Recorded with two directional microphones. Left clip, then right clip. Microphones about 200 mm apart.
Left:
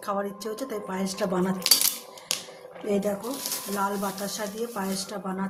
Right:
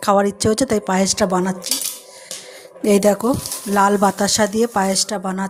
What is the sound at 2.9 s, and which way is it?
Speech, 50° right (ahead or behind).